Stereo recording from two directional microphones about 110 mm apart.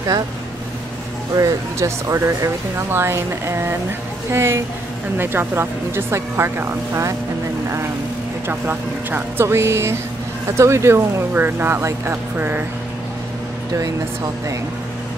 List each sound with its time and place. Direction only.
1.3 s speech: 30° right (ahead or behind)
8.5 s speech: 20° right (ahead or behind)